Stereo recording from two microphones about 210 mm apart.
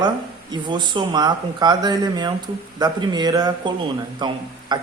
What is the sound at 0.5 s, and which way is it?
A man's voice, 20° right (ahead or behind).